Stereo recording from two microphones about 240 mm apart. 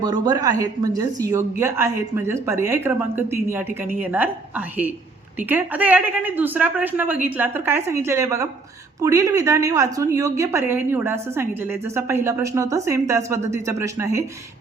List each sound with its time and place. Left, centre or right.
0.0 s a woman's voice: centre